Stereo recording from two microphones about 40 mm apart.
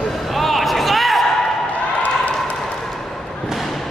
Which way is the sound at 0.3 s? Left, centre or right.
Centre.